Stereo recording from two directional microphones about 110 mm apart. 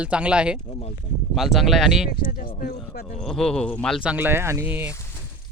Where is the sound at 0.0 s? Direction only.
10° right (ahead or behind).